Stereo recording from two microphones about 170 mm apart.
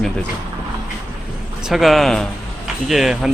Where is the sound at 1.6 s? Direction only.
Centre (ahead or behind).